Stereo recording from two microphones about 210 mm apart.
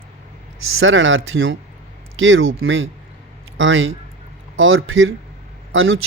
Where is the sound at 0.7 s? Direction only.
70° right (ahead or behind).